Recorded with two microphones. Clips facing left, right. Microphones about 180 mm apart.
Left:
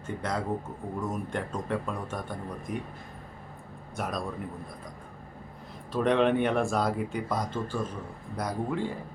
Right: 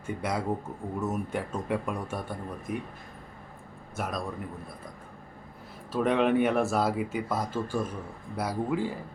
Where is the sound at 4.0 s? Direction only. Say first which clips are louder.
Even; centre (ahead or behind).